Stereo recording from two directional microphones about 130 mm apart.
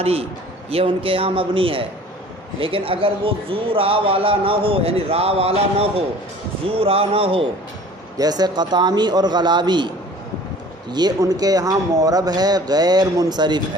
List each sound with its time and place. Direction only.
0.0 s a man's voice: 50° right (ahead or behind)
8.2 s a man's voice: 30° right (ahead or behind)
10.9 s speech: 30° right (ahead or behind)